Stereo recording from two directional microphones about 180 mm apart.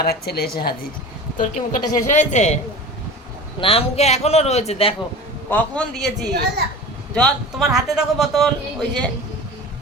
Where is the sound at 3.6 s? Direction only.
30° left (ahead or behind).